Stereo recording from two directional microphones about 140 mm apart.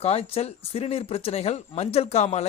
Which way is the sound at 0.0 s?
45° left (ahead or behind).